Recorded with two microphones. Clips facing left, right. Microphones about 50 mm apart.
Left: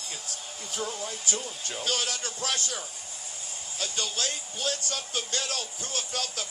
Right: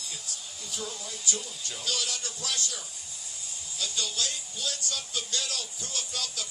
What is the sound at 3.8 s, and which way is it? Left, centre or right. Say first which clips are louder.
Speech: left 1 dB; left.